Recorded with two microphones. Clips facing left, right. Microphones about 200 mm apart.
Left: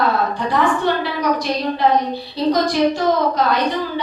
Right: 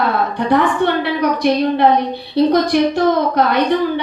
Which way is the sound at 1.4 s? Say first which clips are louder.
Right 6 dB; 60° right (ahead or behind).